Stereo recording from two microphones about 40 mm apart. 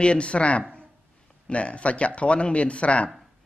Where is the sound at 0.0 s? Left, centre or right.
Left.